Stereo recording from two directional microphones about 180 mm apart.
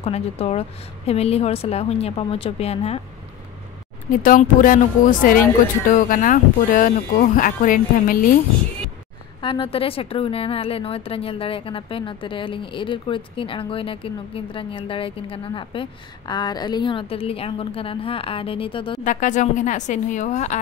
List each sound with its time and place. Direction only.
0.0 s a woman's voice: 35° left (ahead or behind)
4.1 s speech: 45° left (ahead or behind)
9.4 s a woman's voice: 30° left (ahead or behind)
19.0 s speech: 45° left (ahead or behind)